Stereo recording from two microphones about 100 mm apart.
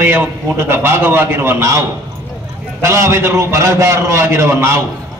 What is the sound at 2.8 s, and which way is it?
A man's voice, 30° right (ahead or behind).